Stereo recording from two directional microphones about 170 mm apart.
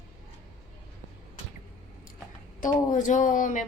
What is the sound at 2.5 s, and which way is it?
Speech, 50° left (ahead or behind).